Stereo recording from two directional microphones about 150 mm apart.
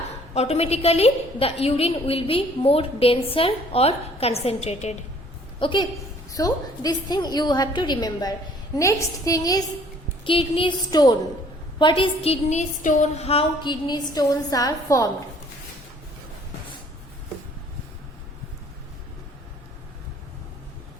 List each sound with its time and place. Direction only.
0.3 s a woman's voice: 45° left (ahead or behind)
5.5 s a woman's voice: 35° left (ahead or behind)
10.2 s a woman's voice: 35° left (ahead or behind)
14.1 s a woman's voice: 25° left (ahead or behind)